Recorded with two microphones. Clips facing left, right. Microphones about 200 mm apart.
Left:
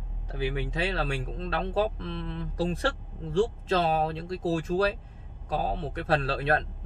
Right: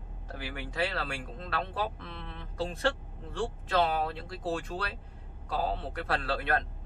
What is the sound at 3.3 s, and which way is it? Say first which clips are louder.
Speech: left 6 dB; 25° left (ahead or behind).